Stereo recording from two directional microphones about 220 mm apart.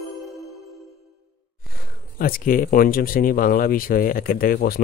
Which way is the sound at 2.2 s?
40° left (ahead or behind).